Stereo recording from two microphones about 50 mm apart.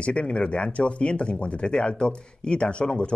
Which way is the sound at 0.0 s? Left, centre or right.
Left.